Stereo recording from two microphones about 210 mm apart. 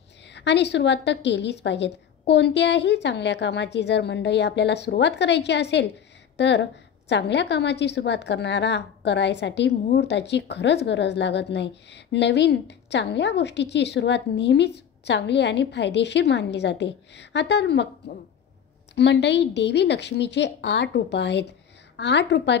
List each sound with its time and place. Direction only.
0.3 s a woman's voice: 55° left (ahead or behind)